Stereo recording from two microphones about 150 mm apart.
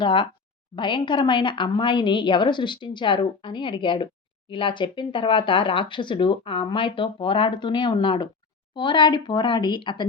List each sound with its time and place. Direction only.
0.0 s a woman's voice: 30° left (ahead or behind)